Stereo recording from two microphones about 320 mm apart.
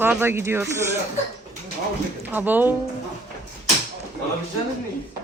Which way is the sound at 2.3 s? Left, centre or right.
Centre.